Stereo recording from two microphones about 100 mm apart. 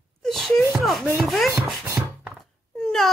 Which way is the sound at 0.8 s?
Centre (ahead or behind).